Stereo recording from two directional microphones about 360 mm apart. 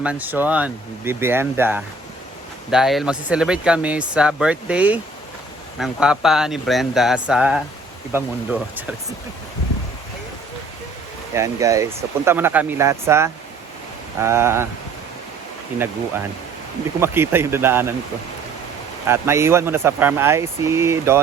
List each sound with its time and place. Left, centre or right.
0.0 s speech: centre
11.3 s speech: centre
17.0 s speech: centre
19.0 s speech: centre